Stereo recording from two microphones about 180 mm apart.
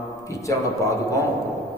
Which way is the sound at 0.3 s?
15° left (ahead or behind).